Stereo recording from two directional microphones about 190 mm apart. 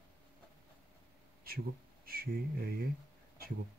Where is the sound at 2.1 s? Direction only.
55° right (ahead or behind).